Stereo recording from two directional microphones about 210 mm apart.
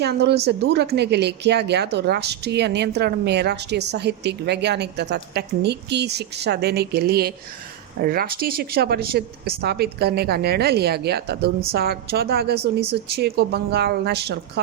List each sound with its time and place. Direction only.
0.0 s speech: 50° right (ahead or behind)